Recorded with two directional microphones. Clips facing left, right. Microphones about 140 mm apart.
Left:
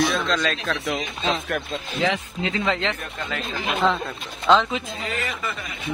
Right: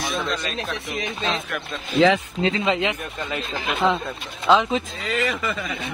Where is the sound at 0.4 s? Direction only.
90° left.